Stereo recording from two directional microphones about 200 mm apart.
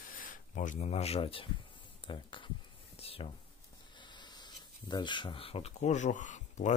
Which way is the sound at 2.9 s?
30° left (ahead or behind).